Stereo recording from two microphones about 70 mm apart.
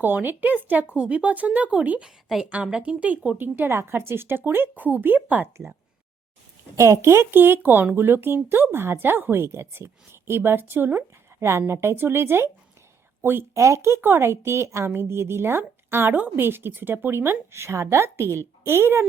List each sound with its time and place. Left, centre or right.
0.0 s speech: right
2.0 s a woman's voice: centre; by 5.5 s right
6.7 s speech: right
13.5 s speech: right
14.0 s speech: right